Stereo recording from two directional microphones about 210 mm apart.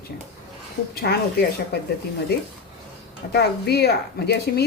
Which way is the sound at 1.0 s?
50° left (ahead or behind).